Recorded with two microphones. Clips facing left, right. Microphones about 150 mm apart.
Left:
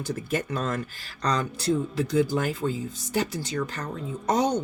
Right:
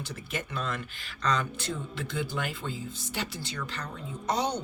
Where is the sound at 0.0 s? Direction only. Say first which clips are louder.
Left 8 dB; 45° left (ahead or behind).